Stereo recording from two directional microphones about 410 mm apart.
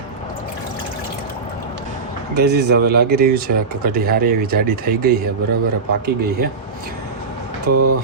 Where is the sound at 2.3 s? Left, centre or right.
Right.